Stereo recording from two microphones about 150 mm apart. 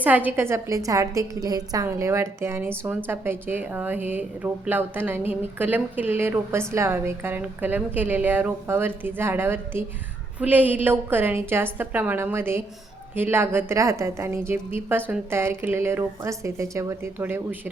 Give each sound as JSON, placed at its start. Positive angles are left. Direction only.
{"t": 0.0, "sound": "a woman's voice", "side_deg": -10}